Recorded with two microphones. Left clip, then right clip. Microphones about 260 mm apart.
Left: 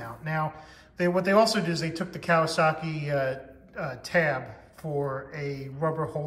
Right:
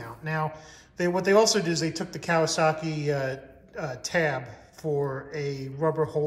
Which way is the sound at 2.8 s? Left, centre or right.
Right.